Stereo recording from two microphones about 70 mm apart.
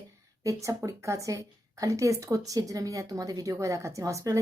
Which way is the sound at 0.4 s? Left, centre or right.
Right.